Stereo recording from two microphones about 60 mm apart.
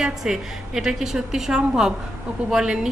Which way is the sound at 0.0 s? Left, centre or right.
Centre.